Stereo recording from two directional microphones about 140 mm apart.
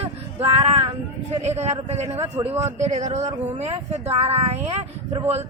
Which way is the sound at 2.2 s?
15° right (ahead or behind).